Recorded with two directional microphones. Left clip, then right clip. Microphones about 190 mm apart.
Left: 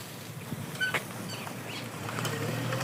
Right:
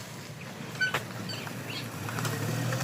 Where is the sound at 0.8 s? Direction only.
35° right (ahead or behind).